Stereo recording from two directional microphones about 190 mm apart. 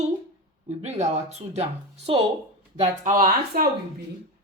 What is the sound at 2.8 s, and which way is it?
Speech, 45° right (ahead or behind).